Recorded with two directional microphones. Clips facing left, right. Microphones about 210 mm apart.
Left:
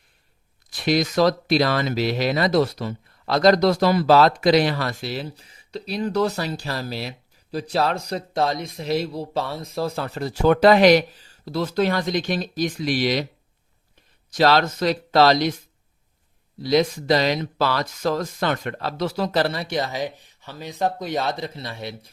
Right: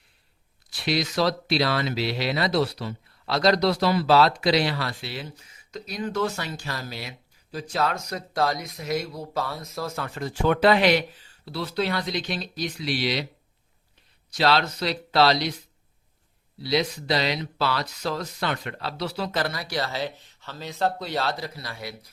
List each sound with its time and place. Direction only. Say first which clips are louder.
0.7 s speech: left 5 dB; 50° left (ahead or behind)
14.3 s speech: left 4 dB; 45° left (ahead or behind); by 22.1 s 25° left (ahead or behind)